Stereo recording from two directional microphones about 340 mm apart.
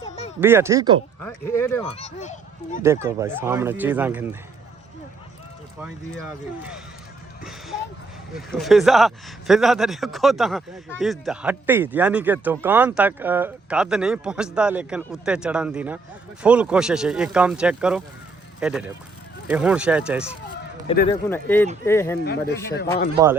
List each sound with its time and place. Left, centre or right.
0.3 s speech: centre
1.2 s speech: centre
2.8 s speech: centre
5.8 s speech: centre
8.4 s speech: centre
22.2 s speech: left
23.1 s speech: centre